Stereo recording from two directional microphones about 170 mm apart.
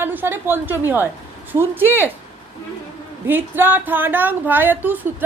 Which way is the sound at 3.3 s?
10° right (ahead or behind).